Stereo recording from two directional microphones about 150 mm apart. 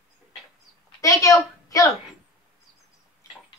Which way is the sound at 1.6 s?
20° left (ahead or behind).